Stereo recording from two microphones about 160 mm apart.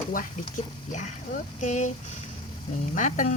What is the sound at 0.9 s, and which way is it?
Speech, 50° left (ahead or behind).